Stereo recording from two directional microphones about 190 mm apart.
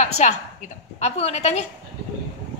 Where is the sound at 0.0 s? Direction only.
40° left (ahead or behind).